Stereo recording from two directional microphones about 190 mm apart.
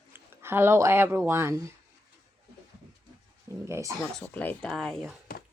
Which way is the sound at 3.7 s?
15° right (ahead or behind).